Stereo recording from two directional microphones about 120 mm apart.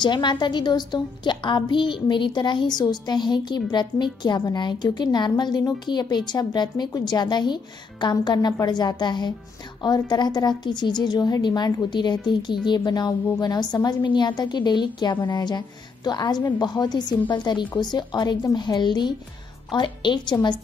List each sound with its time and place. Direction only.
0.0 s a woman's voice: 40° left (ahead or behind)